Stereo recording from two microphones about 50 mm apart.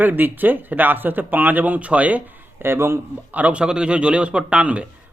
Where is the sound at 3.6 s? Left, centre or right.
Centre.